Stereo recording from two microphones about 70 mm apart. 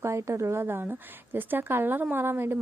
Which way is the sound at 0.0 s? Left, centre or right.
Right.